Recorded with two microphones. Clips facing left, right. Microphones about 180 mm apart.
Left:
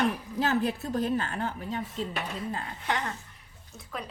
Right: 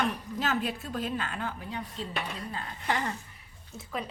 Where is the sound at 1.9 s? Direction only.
Centre (ahead or behind).